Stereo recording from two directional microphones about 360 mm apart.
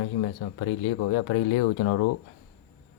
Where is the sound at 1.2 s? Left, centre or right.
Left.